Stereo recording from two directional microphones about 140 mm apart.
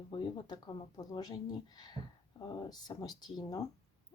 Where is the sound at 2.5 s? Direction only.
30° left (ahead or behind).